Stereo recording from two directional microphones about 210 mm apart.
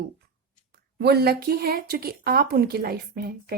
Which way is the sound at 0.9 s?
50° right (ahead or behind).